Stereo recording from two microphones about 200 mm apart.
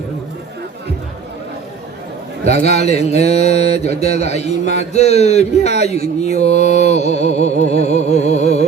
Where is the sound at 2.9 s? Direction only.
35° left (ahead or behind).